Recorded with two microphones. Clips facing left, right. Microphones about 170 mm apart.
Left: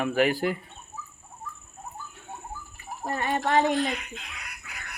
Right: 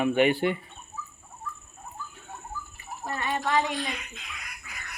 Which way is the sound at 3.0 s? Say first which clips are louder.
Left 3 dB; 45° left (ahead or behind).